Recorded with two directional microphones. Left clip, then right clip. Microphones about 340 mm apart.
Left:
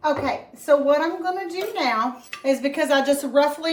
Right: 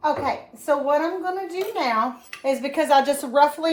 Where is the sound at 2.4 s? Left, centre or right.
Centre.